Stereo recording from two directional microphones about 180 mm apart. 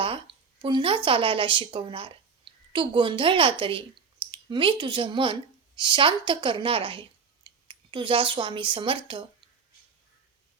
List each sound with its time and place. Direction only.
0.0 s speech: 30° right (ahead or behind)